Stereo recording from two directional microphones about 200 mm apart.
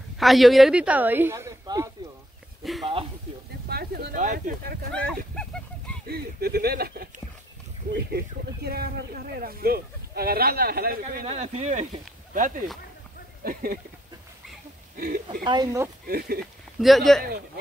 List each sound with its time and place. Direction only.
0.2 s speech: centre (ahead or behind); by 1.9 s 15° right (ahead or behind)
2.6 s a sound: centre (ahead or behind)
3.6 s speech: 50° right (ahead or behind)
4.9 s a sound: 5° left (ahead or behind)
6.0 s speech: 50° right (ahead or behind)
11.2 s speech: 30° right (ahead or behind)
13.4 s a sound: 45° right (ahead or behind)
15.0 s speech: 45° right (ahead or behind)
15.4 s speech: 20° right (ahead or behind)
16.1 s speech: 50° right (ahead or behind)
16.8 s speech: centre (ahead or behind)